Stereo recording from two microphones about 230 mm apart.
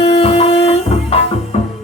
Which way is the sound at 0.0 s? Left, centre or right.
Left.